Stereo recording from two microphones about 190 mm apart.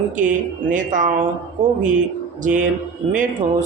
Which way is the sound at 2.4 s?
45° right (ahead or behind).